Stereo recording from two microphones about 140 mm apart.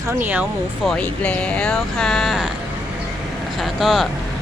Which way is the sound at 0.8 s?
10° left (ahead or behind).